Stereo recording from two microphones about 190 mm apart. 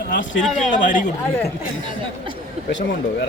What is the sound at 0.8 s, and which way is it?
Speech, 45° left (ahead or behind).